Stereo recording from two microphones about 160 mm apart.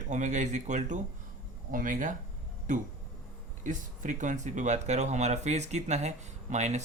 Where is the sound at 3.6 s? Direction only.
50° right (ahead or behind).